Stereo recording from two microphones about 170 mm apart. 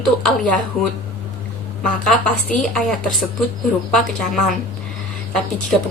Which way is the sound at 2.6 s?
5° left (ahead or behind).